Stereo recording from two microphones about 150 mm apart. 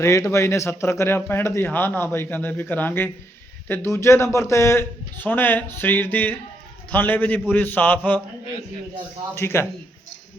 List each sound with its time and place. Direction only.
0.0 s speech: 20° left (ahead or behind)
9.3 s speech: 15° left (ahead or behind)